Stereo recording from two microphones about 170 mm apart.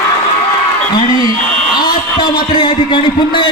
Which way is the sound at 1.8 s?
25° left (ahead or behind).